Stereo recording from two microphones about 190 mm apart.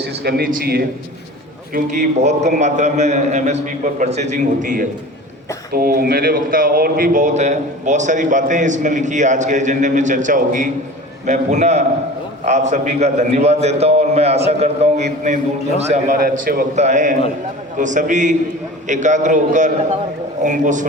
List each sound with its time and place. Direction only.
0.0 s a man's voice: 60° right (ahead or behind)
1.7 s a man's voice: 40° right (ahead or behind)
16.7 s speech: 40° right (ahead or behind)